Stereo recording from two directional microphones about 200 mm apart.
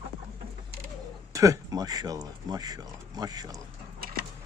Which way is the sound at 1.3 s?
15° right (ahead or behind).